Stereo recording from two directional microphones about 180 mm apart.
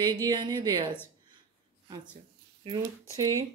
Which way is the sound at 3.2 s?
20° right (ahead or behind).